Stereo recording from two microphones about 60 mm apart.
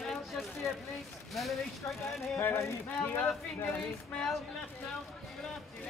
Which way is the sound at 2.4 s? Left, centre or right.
Left.